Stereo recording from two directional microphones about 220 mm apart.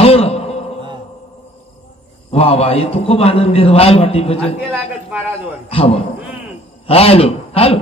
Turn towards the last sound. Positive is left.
turn(degrees=25)  # may be behind; listen again after turning